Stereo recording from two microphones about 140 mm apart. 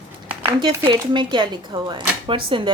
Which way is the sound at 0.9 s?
35° right (ahead or behind).